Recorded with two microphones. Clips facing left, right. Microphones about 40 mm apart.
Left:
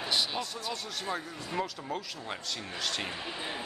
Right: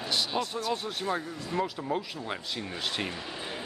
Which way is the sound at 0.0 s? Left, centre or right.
Centre.